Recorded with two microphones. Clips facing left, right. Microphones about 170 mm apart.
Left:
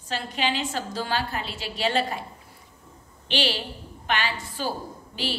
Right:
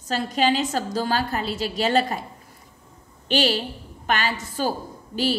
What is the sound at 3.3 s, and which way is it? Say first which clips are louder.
A woman's voice: right 5 dB; 45° right (ahead or behind).